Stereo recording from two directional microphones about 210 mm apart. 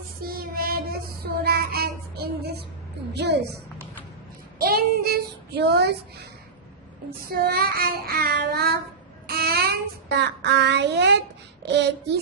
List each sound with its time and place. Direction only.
0.2 s child singing: 45° right (ahead or behind)
4.5 s child singing: 45° right (ahead or behind)
7.3 s child singing: 45° right (ahead or behind)